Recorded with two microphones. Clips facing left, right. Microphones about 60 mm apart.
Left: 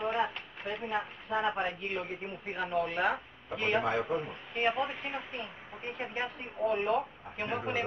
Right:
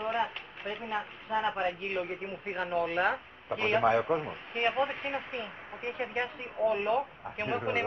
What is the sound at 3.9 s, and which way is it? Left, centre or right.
Speech, right.